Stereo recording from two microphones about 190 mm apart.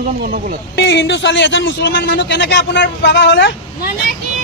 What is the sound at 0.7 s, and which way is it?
A man's voice, 70° left (ahead or behind).